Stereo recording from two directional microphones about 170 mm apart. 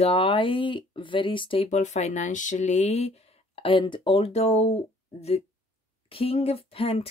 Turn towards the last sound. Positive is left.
turn(degrees=35)  # may be behind; listen again after turning